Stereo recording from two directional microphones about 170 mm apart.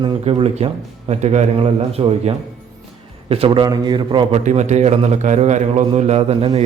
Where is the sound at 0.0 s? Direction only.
30° right (ahead or behind).